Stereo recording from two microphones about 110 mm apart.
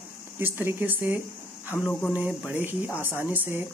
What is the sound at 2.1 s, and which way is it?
Speech, 15° right (ahead or behind).